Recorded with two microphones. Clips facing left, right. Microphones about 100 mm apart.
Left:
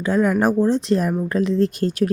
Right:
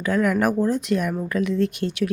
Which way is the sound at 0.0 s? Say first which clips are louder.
Left 2 dB; 25° left (ahead or behind).